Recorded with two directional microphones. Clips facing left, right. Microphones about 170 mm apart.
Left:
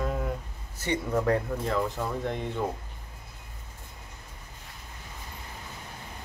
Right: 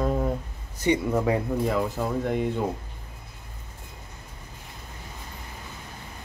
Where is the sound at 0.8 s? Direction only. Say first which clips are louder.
Right 4 dB; 10° right (ahead or behind).